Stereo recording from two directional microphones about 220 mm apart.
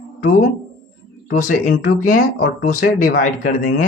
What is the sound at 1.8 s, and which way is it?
Speech, 40° left (ahead or behind).